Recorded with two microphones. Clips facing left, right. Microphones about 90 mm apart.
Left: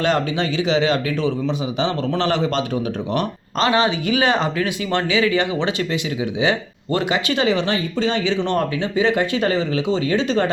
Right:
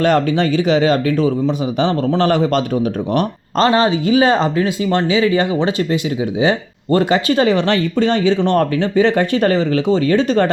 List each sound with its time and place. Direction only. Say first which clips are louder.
0.0 s speech: right 5 dB; 50° right (ahead or behind)